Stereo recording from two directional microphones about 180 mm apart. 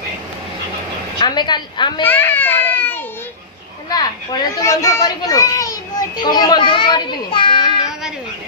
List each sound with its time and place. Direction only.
1.2 s a woman's voice: 25° left (ahead or behind)
2.0 s a sound: 10° left (ahead or behind)
3.9 s a child's voice: 20° left (ahead or behind)